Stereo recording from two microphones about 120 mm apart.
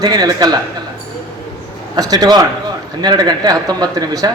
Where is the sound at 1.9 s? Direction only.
35° right (ahead or behind).